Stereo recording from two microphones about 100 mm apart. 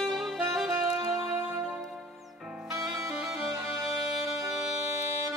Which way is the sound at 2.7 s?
35° right (ahead or behind).